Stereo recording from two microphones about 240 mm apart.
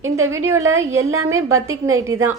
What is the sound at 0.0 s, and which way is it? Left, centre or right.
A woman's voice, right.